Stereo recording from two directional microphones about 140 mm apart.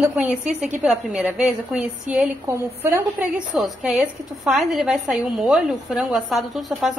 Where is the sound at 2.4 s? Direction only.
20° right (ahead or behind).